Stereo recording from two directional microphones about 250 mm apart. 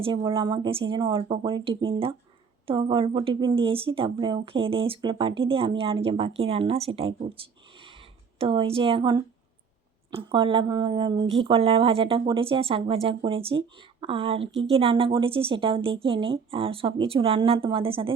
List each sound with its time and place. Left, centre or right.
0.0 s speech: centre